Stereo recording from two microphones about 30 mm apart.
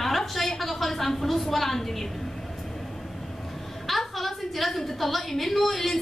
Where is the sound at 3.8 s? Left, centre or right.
Centre.